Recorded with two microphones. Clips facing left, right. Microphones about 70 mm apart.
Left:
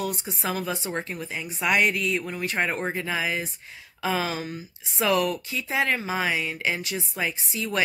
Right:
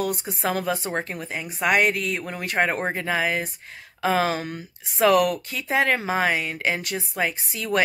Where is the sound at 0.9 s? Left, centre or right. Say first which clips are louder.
Right 3 dB; right.